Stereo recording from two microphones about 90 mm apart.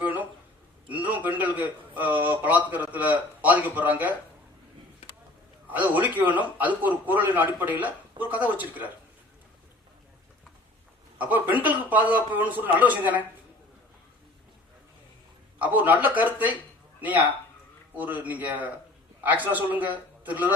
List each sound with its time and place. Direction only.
0.0 s a sound: 20° right (ahead or behind)
0.9 s a man's voice: 20° right (ahead or behind)
5.6 s a man's voice: 20° right (ahead or behind)
11.2 s a man's voice: 20° right (ahead or behind)
15.5 s a man's voice: 20° right (ahead or behind)